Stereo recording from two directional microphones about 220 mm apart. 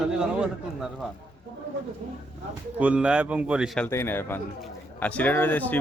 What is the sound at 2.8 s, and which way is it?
A man's voice, 5° right (ahead or behind).